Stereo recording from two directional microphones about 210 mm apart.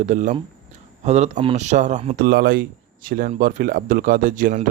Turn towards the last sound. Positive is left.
turn(degrees=-40)  # may be behind; listen again after turning